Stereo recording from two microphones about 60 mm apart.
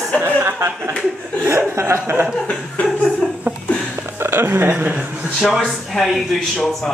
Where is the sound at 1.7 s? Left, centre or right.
Right.